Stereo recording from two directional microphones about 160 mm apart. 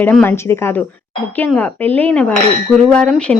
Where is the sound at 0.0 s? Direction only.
10° left (ahead or behind).